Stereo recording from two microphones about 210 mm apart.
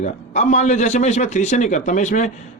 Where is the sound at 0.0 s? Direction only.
35° left (ahead or behind).